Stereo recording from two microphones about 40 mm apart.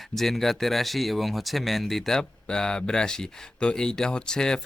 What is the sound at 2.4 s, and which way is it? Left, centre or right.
Speech, left.